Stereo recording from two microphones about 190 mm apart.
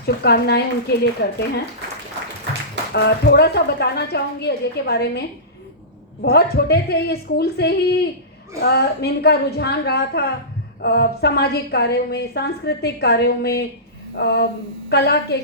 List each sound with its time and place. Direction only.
0.0 s a woman's voice: 55° left (ahead or behind)
2.9 s a woman's voice: 60° left (ahead or behind)
6.2 s a woman's voice: 60° left (ahead or behind)